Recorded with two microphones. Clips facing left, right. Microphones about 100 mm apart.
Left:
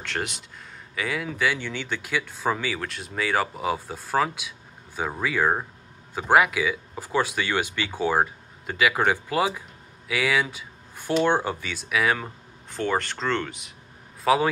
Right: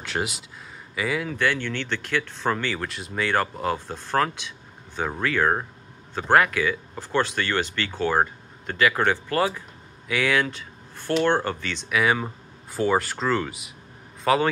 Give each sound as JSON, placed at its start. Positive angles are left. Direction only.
{"t": 0.0, "sound": "speech", "side_deg": -5}